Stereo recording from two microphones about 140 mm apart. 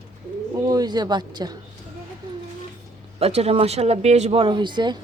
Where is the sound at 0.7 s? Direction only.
30° right (ahead or behind).